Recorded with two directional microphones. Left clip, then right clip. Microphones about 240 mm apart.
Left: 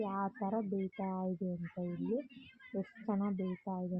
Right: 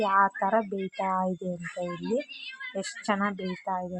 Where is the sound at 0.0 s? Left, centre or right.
Right.